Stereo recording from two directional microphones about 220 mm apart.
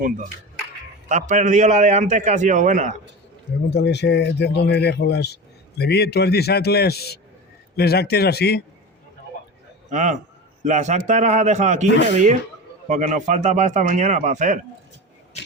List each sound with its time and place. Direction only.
1.0 s a man's voice: 35° right (ahead or behind)
3.8 s speech: 50° left (ahead or behind)
9.9 s a man's voice: 35° right (ahead or behind)
15.3 s a sound: 30° left (ahead or behind)